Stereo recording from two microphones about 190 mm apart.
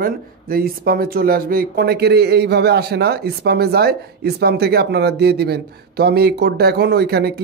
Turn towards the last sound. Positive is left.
turn(degrees=-55)  # may be behind; listen again after turning